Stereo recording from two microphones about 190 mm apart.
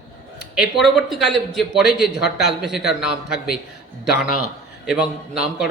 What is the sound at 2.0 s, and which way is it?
Speech, 60° left (ahead or behind).